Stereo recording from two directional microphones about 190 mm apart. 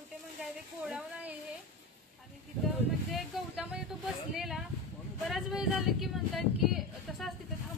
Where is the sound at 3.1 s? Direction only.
Centre (ahead or behind).